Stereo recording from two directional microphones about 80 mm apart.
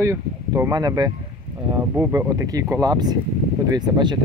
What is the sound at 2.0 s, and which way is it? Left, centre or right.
Speech, right.